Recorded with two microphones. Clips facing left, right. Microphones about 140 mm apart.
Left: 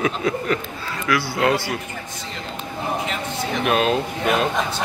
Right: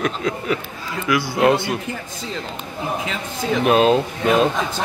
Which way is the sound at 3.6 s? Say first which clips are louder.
Right 5 dB; 30° right (ahead or behind).